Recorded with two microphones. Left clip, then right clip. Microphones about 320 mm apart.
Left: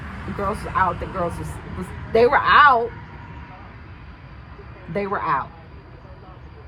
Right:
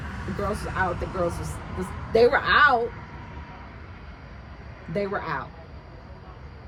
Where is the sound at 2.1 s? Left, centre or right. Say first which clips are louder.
Left 5 dB; centre.